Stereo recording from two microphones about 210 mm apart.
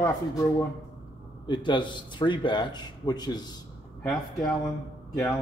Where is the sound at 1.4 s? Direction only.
20° left (ahead or behind).